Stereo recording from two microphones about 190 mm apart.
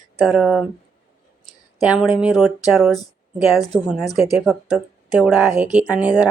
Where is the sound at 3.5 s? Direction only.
20° left (ahead or behind).